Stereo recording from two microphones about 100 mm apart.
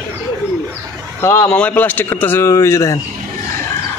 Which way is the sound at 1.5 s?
15° left (ahead or behind).